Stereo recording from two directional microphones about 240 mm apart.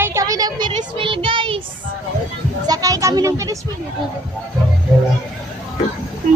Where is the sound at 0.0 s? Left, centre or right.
Centre.